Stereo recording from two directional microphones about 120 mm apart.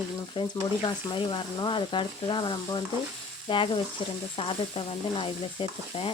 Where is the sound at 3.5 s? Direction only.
45° left (ahead or behind).